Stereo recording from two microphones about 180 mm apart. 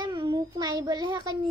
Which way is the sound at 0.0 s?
25° right (ahead or behind).